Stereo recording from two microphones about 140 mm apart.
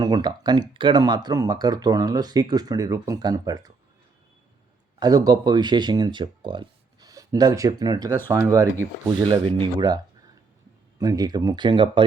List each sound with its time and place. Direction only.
0.0 s speech: 30° right (ahead or behind)
4.9 s speech: 30° right (ahead or behind)
9.4 s speech: 40° right (ahead or behind)
11.0 s speech: 30° right (ahead or behind)